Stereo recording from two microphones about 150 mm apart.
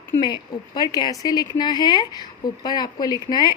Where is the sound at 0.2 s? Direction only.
30° left (ahead or behind).